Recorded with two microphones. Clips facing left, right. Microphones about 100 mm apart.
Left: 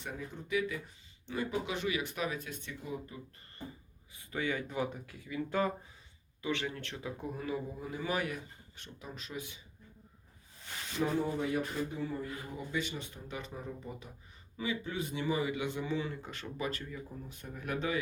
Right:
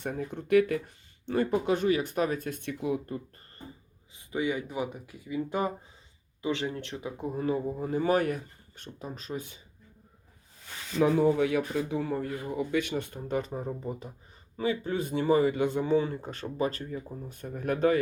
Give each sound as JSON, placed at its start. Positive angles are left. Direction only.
{"t": 0.0, "sound": "speech", "side_deg": -50}
{"t": 4.1, "sound": "speech", "side_deg": -20}
{"t": 7.3, "sound": "speech", "side_deg": -35}
{"t": 11.0, "sound": "speech", "side_deg": -80}